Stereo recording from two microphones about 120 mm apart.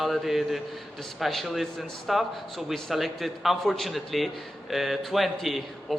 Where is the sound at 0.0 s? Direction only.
Centre (ahead or behind).